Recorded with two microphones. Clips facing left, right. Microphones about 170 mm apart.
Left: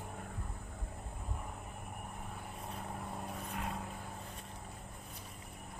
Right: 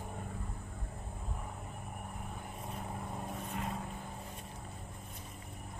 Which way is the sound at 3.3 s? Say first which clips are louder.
Right 2 dB; centre (ahead or behind).